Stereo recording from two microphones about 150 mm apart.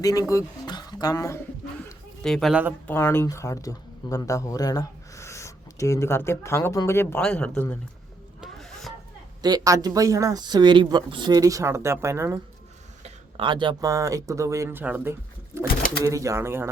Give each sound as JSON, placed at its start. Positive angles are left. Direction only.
{"t": 0.0, "sound": "speech", "side_deg": 25}
{"t": 2.2, "sound": "speech", "side_deg": 0}
{"t": 2.8, "sound": "speech", "side_deg": 15}
{"t": 8.4, "sound": "a sound", "side_deg": 0}
{"t": 9.4, "sound": "speech", "side_deg": -25}
{"t": 13.3, "sound": "speech", "side_deg": -35}